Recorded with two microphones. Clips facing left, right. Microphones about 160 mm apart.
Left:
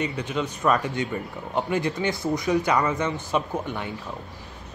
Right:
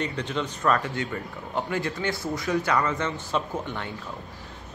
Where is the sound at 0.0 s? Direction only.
10° left (ahead or behind).